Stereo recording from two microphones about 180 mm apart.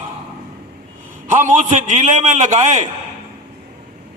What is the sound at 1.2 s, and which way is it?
A man's voice, 45° right (ahead or behind).